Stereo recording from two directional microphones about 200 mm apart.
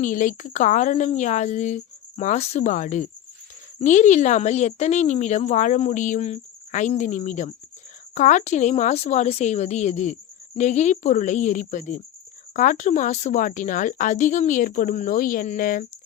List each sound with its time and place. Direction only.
0.0 s speech: 40° left (ahead or behind)